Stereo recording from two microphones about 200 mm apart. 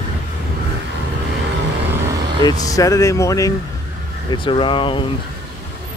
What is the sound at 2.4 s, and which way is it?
Speech, 20° left (ahead or behind).